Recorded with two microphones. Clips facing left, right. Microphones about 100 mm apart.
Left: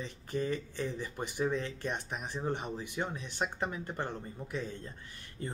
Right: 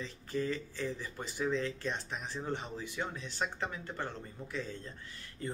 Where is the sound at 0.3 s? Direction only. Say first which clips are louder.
Left 1 dB; 20° left (ahead or behind).